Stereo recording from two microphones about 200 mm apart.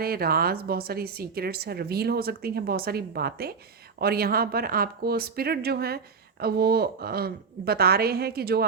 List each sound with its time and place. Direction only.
0.0 s a woman's voice: 50° right (ahead or behind)